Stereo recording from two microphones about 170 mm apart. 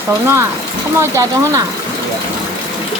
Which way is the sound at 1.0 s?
15° right (ahead or behind).